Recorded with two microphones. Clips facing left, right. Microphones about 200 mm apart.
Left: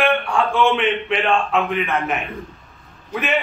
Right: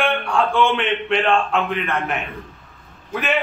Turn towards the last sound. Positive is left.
turn(degrees=0)  # may be behind; listen again after turning